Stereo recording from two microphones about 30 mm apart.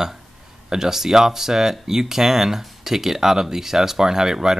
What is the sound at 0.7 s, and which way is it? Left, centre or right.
Speech, centre.